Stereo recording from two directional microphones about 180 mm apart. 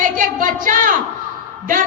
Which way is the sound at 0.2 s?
50° right (ahead or behind).